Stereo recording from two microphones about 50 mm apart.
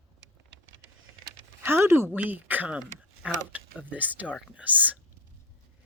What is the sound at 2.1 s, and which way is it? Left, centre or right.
Speech, right.